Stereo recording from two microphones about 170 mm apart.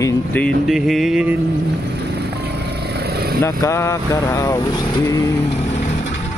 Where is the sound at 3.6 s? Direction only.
15° left (ahead or behind).